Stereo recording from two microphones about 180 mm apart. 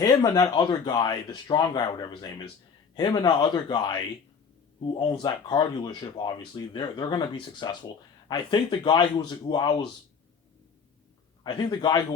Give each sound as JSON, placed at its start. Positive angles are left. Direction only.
{"t": 0.0, "sound": "speech", "side_deg": 20}
{"t": 11.4, "sound": "speech", "side_deg": 25}